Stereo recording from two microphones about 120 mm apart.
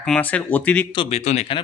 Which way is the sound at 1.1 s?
65° left (ahead or behind).